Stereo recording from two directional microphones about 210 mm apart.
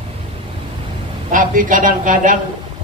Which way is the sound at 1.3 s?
40° right (ahead or behind).